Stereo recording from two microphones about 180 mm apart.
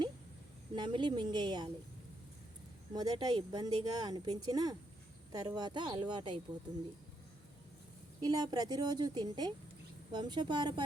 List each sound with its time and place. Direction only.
0.8 s speech: 25° right (ahead or behind)
2.9 s speech: 20° right (ahead or behind)
8.2 s speech: 25° right (ahead or behind)